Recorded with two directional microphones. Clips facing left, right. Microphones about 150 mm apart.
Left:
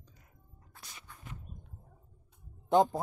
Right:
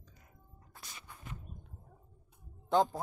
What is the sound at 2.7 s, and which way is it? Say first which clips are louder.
Speech: left 3 dB; 15° left (ahead or behind).